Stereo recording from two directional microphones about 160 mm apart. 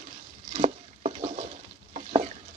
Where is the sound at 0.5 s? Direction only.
40° right (ahead or behind).